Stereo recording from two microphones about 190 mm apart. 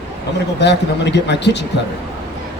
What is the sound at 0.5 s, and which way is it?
Speech, 65° left (ahead or behind).